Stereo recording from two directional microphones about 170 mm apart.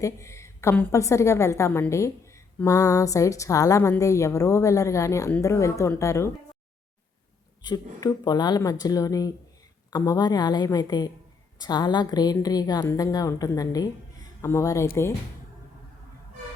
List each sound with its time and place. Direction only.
0.0 s a woman's voice: 15° left (ahead or behind)
7.6 s a woman's voice: 25° left (ahead or behind)